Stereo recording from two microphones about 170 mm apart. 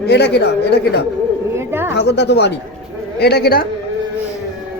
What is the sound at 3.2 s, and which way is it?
Speech, 70° left (ahead or behind).